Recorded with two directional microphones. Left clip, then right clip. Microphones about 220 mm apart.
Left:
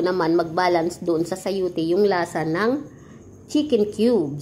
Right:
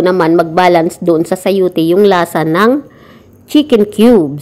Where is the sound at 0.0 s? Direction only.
40° right (ahead or behind).